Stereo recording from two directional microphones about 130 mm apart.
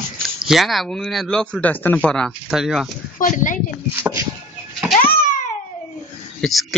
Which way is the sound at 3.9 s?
15° right (ahead or behind).